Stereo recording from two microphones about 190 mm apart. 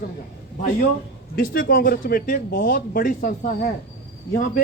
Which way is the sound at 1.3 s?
55° left (ahead or behind).